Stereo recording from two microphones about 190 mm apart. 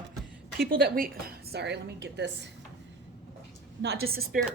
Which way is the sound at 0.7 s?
55° right (ahead or behind).